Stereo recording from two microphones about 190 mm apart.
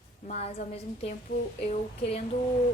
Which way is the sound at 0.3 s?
35° left (ahead or behind).